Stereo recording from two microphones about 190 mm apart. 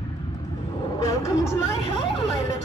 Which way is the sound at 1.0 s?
15° left (ahead or behind).